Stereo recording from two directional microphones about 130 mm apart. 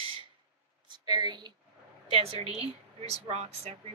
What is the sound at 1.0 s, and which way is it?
Speech, 30° right (ahead or behind).